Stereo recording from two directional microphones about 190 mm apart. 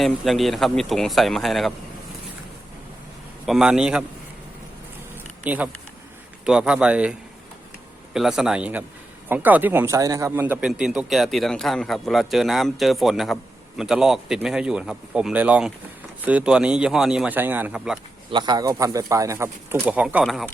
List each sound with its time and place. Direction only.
0.0 s a man's voice: centre (ahead or behind)
3.4 s a man's voice: centre (ahead or behind)
5.5 s a man's voice: 10° right (ahead or behind)
18.3 s speech: 25° right (ahead or behind); by 20.5 s centre (ahead or behind)